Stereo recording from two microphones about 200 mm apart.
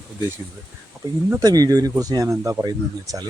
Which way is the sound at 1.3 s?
20° right (ahead or behind).